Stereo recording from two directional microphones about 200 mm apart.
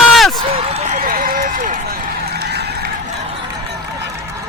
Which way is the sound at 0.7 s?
45° right (ahead or behind).